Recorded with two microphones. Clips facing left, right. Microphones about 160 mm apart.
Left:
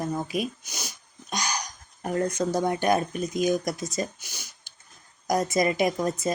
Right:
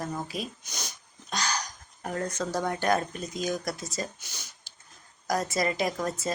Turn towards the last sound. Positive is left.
turn(degrees=15)  # may be behind; listen again after turning